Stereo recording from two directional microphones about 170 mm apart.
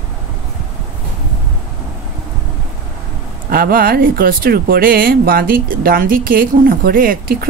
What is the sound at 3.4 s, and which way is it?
Speech, 60° right (ahead or behind).